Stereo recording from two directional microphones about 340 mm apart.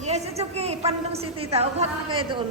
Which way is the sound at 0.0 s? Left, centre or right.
Centre.